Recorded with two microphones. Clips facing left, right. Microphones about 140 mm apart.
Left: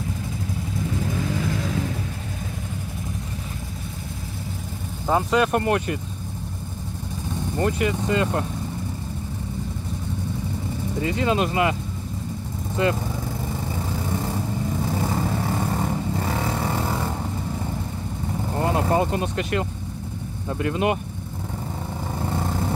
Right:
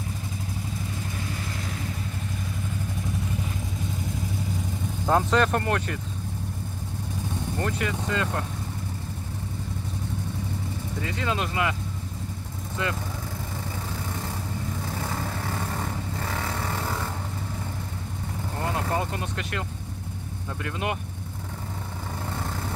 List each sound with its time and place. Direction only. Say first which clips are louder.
5.0 s speech: left 2 dB; 5° left (ahead or behind)
7.5 s speech: left 7 dB; 15° left (ahead or behind)
11.0 s speech: left 7 dB; 20° left (ahead or behind)
14.9 s vehicle: left 7 dB; 15° left (ahead or behind)
18.6 s speech: left 7 dB; 20° left (ahead or behind)
20.6 s speech: left 8 dB; 20° left (ahead or behind)
22.2 s vehicle: left 7 dB; 20° left (ahead or behind)